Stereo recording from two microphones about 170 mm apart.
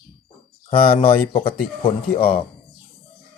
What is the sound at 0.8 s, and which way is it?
Speech, 50° left (ahead or behind).